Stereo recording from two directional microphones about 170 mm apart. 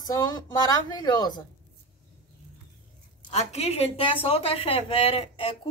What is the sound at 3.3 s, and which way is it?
A woman's voice, 40° left (ahead or behind).